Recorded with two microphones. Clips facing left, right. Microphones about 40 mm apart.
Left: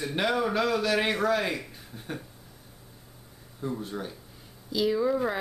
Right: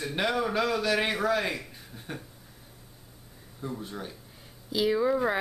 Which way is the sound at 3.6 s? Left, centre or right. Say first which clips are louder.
Left 3 dB; centre.